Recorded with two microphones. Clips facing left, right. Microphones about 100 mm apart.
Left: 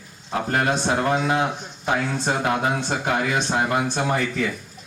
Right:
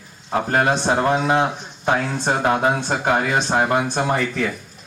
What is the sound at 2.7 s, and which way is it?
Speech, 45° right (ahead or behind).